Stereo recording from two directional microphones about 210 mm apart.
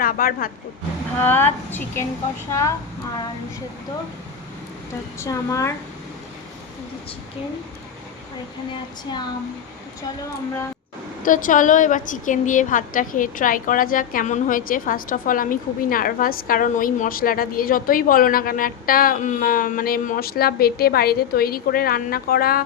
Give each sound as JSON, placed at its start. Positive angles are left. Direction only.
{"t": 0.0, "sound": "speech", "side_deg": 45}
{"t": 1.2, "sound": "a woman's voice", "side_deg": 10}
{"t": 5.2, "sound": "a woman's voice", "side_deg": 15}
{"t": 11.2, "sound": "a woman's voice", "side_deg": 40}